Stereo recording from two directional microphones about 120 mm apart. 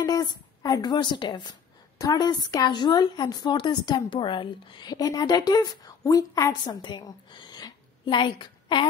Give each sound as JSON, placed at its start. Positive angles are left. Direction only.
{"t": 0.0, "sound": "speech", "side_deg": 35}